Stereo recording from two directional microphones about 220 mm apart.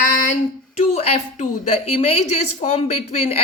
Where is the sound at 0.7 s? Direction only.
30° left (ahead or behind).